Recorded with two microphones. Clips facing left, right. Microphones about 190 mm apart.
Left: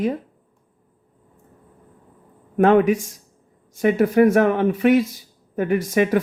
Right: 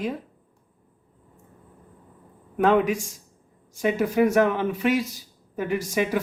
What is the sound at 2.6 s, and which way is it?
Speech, 55° left (ahead or behind).